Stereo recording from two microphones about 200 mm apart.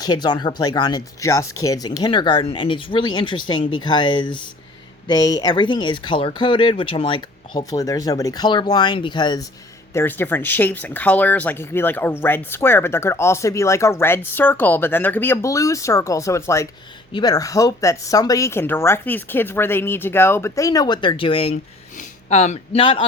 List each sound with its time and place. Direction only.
0.0 s speech: 20° left (ahead or behind)